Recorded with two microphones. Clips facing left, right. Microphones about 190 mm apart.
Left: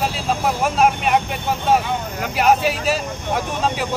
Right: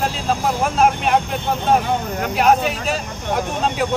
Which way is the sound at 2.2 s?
Centre (ahead or behind).